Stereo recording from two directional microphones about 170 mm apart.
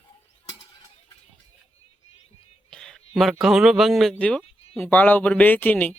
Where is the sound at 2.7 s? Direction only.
5° left (ahead or behind).